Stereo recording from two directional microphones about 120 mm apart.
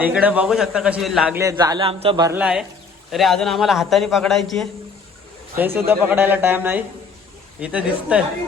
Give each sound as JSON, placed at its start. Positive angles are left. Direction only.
{"t": 0.0, "sound": "a man's voice", "side_deg": -15}
{"t": 1.4, "sound": "a man's voice", "side_deg": -30}
{"t": 1.8, "sound": "a man's voice", "side_deg": -50}
{"t": 2.3, "sound": "a man's voice", "side_deg": -10}
{"t": 5.5, "sound": "a man's voice", "side_deg": -15}